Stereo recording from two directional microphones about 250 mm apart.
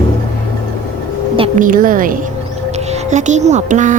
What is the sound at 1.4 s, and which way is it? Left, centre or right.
A woman's voice, right.